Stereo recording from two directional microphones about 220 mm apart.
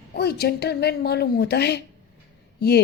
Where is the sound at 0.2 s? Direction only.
45° left (ahead or behind).